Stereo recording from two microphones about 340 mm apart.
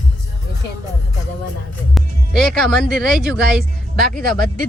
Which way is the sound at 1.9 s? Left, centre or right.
Centre.